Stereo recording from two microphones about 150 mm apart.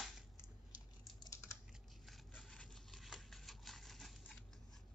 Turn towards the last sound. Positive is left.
turn(degrees=0)  # may be behind; listen again after turning